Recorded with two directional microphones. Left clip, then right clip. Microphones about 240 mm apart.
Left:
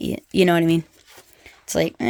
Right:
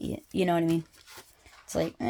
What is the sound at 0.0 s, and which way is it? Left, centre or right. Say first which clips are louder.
Speech: left 10 dB; left.